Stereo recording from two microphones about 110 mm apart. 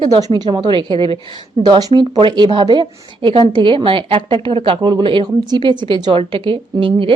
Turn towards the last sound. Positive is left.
turn(degrees=-50)  # may be behind; listen again after turning